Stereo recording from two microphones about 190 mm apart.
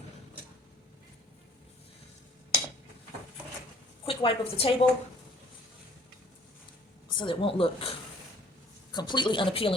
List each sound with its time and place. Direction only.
4.0 s a woman's voice: 30° left (ahead or behind)
7.2 s a woman's voice: 25° left (ahead or behind)